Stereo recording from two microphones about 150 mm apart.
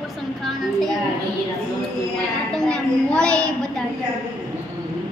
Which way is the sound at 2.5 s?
5° left (ahead or behind).